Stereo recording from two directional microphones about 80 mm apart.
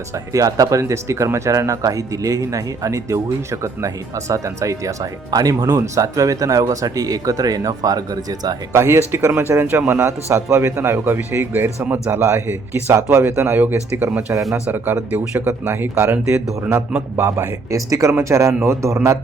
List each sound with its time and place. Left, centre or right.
0.1 s speech: right
8.8 s speech: right
12.1 s speech: right
16.6 s speech: right